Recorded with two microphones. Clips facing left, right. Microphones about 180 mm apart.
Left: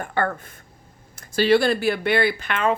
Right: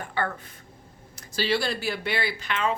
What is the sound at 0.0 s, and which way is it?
Speech, 50° left (ahead or behind).